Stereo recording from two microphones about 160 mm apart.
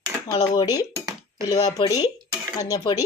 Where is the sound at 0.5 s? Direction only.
25° left (ahead or behind).